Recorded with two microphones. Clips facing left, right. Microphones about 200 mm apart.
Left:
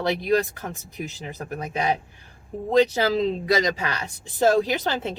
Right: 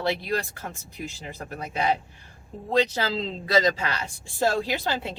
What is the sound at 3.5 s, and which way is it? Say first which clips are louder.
Speech: right 5 dB; 15° left (ahead or behind).